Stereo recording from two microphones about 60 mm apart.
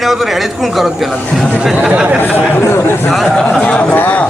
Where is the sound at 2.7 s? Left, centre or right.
Left.